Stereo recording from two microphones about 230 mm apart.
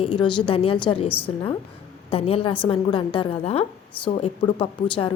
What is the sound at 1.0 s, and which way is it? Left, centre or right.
Speech, left.